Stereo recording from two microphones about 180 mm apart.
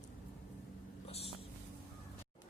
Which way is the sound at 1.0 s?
35° left (ahead or behind).